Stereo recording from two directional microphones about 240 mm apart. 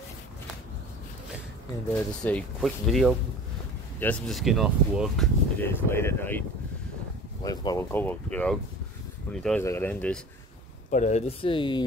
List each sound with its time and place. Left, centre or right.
2.2 s speech: centre
7.4 s speech: centre
10.9 s speech: left